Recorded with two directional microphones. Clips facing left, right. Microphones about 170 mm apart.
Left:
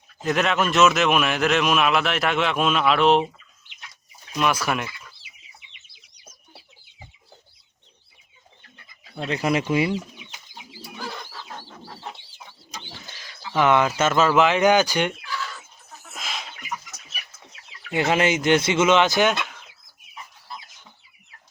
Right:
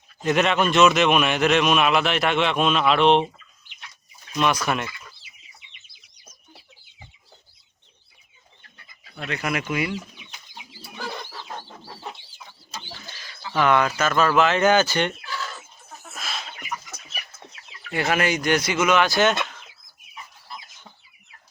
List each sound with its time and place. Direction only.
0.2 s a man's voice: centre (ahead or behind)
4.4 s a man's voice: 5° left (ahead or behind)
9.1 s speech: 30° left (ahead or behind)
12.7 s bird: 20° left (ahead or behind)
13.3 s speech: 15° left (ahead or behind)
16.1 s a sound: 15° left (ahead or behind)
17.9 s speech: 20° left (ahead or behind)
19.3 s chicken: 5° left (ahead or behind)